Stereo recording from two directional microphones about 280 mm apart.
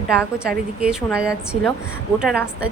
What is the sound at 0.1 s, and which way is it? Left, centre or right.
A woman's voice, centre.